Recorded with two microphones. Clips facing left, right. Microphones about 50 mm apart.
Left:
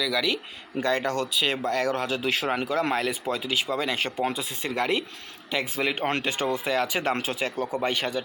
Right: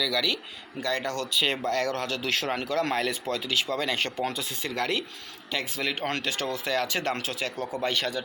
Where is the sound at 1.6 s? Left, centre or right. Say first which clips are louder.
Left 2 dB; centre.